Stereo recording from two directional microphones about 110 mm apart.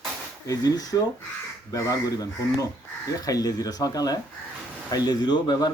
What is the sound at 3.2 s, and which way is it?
Speech, 35° left (ahead or behind).